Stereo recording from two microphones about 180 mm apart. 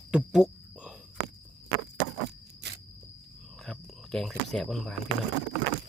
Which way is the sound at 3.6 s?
Centre (ahead or behind).